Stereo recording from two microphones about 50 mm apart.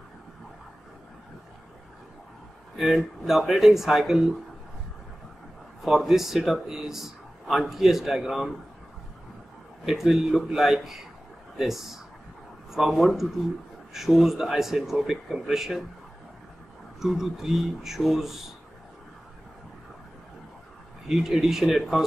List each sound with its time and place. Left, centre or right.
2.8 s speech: centre
5.8 s a man's voice: centre
9.8 s a man's voice: centre
17.0 s a man's voice: centre
21.1 s a man's voice: centre